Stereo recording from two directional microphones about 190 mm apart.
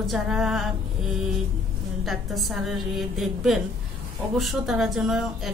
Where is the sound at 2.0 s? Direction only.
Centre (ahead or behind).